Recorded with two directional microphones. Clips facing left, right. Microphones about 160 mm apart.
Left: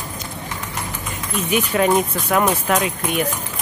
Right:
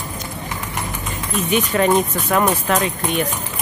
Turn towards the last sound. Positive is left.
turn(degrees=5)  # may be behind; listen again after turning